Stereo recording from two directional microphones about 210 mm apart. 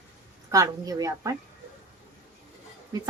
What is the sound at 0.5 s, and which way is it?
Speech, 20° right (ahead or behind).